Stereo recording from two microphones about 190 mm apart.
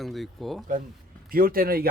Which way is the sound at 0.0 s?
Centre (ahead or behind).